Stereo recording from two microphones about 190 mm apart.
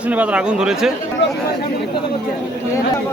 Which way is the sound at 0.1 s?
5° right (ahead or behind).